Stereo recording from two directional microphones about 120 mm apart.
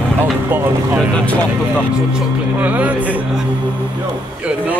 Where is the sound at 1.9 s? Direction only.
5° right (ahead or behind).